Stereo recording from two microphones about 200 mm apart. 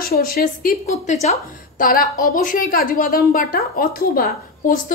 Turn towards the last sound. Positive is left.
turn(degrees=45)  # may be behind; listen again after turning